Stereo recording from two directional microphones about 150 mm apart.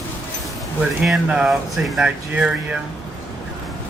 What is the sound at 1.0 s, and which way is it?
Speech, 5° right (ahead or behind).